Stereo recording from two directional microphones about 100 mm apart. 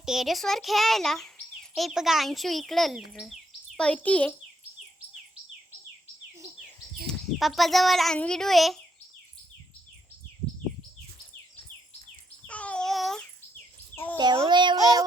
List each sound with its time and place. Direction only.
0.0 s speech: 5° right (ahead or behind)
3.8 s a child's voice: 15° left (ahead or behind)
7.1 s speech: centre (ahead or behind)
12.5 s babbling: 15° left (ahead or behind)
13.9 s a child's voice: 20° left (ahead or behind)
14.4 s a sound: 50° right (ahead or behind)
14.8 s child singing: 35° right (ahead or behind)